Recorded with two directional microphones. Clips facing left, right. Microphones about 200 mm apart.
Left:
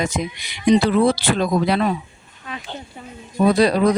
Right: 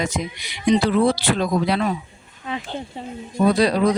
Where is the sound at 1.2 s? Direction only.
50° left (ahead or behind).